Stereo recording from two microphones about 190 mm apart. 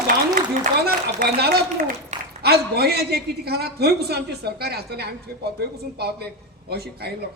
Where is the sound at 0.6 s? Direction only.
50° right (ahead or behind).